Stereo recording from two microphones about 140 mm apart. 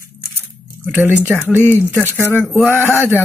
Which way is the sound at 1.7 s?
15° left (ahead or behind).